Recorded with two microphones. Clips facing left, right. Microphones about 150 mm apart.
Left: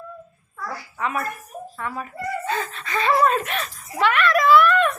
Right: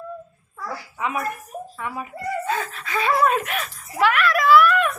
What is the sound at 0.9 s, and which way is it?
Speech, 15° right (ahead or behind).